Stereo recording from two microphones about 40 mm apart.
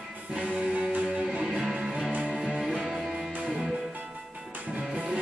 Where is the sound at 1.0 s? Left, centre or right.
Right.